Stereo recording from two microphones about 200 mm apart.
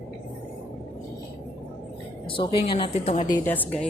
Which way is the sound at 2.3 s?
25° left (ahead or behind).